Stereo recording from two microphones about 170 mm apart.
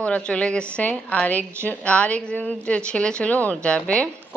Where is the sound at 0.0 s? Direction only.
5° left (ahead or behind).